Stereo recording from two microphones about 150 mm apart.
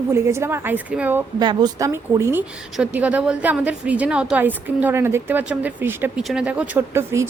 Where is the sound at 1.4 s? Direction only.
30° right (ahead or behind).